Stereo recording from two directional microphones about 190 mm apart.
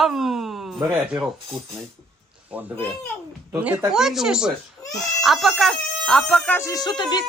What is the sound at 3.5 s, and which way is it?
Speech, 5° right (ahead or behind).